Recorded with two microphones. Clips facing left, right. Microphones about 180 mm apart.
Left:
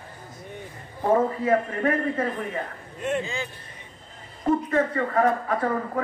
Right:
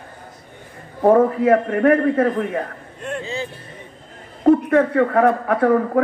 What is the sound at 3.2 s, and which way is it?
Speech, 35° right (ahead or behind).